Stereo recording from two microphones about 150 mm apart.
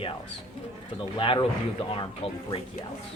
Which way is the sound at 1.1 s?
30° left (ahead or behind).